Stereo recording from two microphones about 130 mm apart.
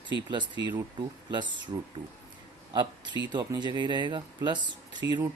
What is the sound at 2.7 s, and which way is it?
Speech, 35° right (ahead or behind).